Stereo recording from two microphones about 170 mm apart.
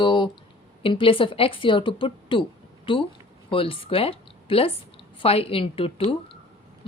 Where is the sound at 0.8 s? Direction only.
30° left (ahead or behind).